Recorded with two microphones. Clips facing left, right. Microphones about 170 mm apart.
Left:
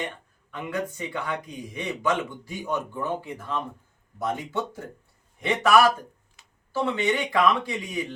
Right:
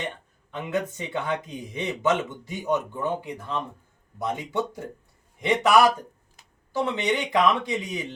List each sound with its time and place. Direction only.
0.5 s speech: 20° right (ahead or behind)